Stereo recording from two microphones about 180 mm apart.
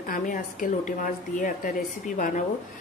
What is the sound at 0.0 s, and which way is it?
A woman's voice, 50° left (ahead or behind).